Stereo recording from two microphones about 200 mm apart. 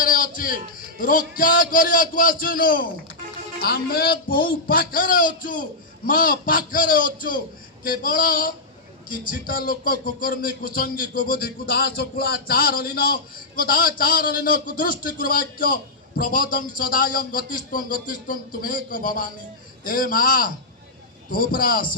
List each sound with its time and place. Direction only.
0.0 s a man's voice: 45° left (ahead or behind)